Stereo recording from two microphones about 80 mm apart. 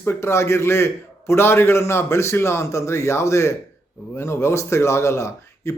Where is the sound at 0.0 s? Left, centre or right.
Left.